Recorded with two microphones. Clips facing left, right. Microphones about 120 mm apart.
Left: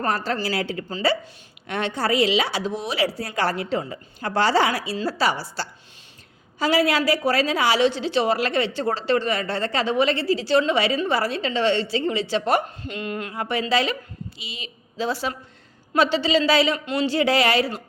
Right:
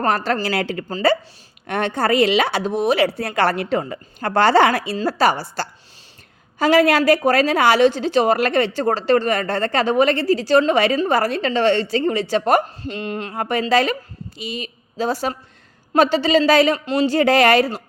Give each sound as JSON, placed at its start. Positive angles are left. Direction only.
{"t": 0.3, "sound": "a woman's voice", "side_deg": -60}
{"t": 0.9, "sound": "a woman's voice", "side_deg": -50}
{"t": 12.8, "sound": "speech", "side_deg": -30}
{"t": 13.3, "sound": "a woman's voice", "side_deg": -50}
{"t": 16.8, "sound": "a woman's voice", "side_deg": -40}